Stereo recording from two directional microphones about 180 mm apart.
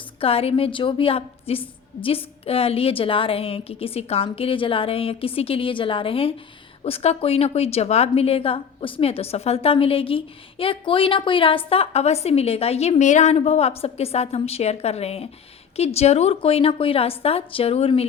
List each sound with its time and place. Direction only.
0.2 s a woman's voice: 30° left (ahead or behind)